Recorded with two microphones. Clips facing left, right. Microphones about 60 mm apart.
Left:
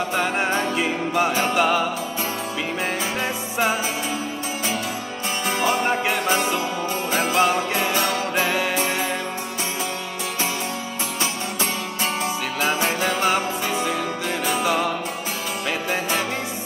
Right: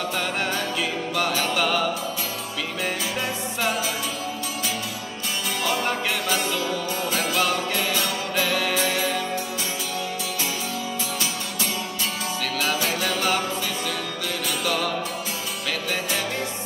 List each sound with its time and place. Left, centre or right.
0.1 s music: left
5.6 s music: left
12.5 s music: left
14.4 s music: left